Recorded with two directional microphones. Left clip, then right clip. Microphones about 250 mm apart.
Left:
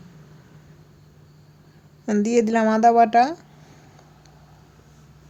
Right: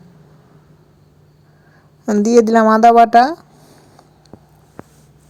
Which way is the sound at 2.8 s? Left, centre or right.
Centre.